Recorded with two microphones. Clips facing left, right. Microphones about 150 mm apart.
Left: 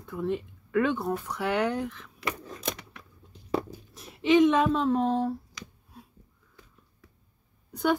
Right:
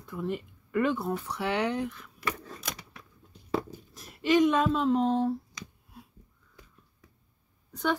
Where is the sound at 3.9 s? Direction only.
Centre (ahead or behind).